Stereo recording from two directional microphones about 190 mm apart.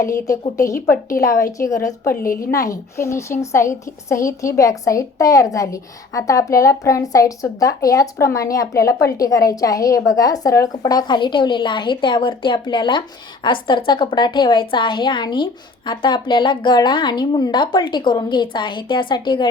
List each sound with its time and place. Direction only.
0.5 s a woman's voice: 15° left (ahead or behind)
2.2 s a woman's voice: 45° left (ahead or behind)
2.5 s a woman's voice: 15° left (ahead or behind)